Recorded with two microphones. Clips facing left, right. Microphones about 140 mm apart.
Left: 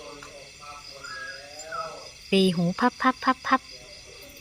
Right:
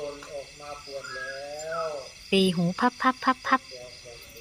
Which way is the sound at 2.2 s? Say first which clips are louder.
Left 1 dB; 15° right (ahead or behind).